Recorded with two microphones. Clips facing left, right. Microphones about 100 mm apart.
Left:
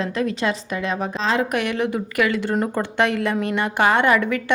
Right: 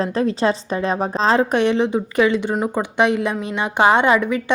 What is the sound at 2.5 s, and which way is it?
A woman's voice, 10° right (ahead or behind).